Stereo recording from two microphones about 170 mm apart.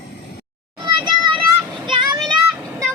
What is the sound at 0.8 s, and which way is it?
Children playing, 30° right (ahead or behind).